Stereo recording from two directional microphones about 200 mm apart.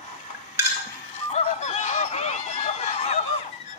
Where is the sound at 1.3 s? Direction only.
35° left (ahead or behind).